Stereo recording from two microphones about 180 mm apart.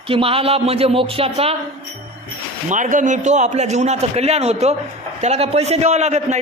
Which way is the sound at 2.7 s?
45° right (ahead or behind).